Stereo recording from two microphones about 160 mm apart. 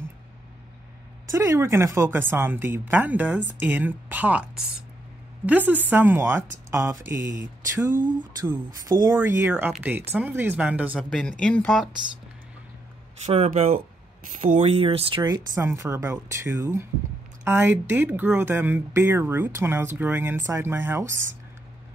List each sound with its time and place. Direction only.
1.3 s speech: 20° right (ahead or behind)
8.4 s speech: 25° right (ahead or behind)
11.1 s speech: 5° left (ahead or behind)
13.2 s speech: 45° right (ahead or behind); by 21.0 s 15° right (ahead or behind)